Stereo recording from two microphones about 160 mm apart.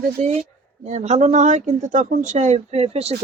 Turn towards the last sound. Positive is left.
turn(degrees=-40)  # may be behind; listen again after turning